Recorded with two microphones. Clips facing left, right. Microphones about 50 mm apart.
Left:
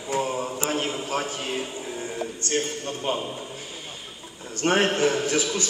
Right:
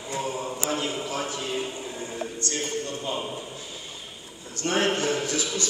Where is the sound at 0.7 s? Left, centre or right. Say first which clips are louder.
Even; left.